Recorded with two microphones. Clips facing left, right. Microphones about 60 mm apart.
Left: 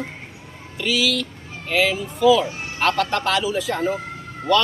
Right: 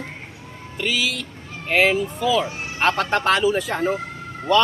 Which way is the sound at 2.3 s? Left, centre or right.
Right.